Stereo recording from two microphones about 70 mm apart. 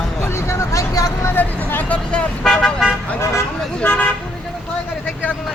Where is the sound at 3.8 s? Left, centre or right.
Left.